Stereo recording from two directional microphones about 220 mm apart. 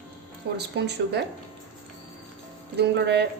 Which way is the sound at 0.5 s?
50° right (ahead or behind).